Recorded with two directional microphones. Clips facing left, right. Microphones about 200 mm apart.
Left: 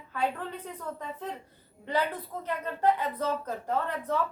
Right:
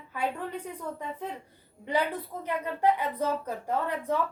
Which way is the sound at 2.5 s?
15° right (ahead or behind).